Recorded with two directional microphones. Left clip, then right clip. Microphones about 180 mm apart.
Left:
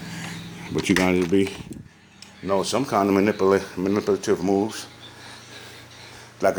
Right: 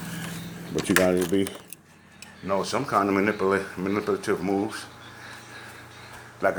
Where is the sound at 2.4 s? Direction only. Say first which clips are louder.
Left 3 dB; 35° left (ahead or behind).